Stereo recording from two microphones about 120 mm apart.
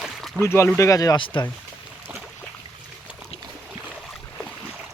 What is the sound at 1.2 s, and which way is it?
Speech, 45° left (ahead or behind).